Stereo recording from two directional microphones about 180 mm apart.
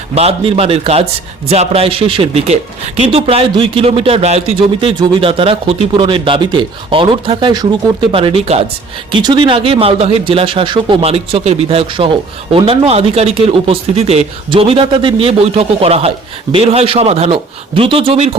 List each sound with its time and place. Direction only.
0.1 s speech: 35° right (ahead or behind)